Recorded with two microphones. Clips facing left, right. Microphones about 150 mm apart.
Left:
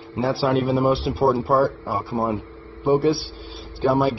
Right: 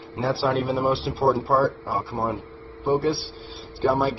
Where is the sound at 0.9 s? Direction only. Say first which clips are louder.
Left 2 dB; 15° left (ahead or behind).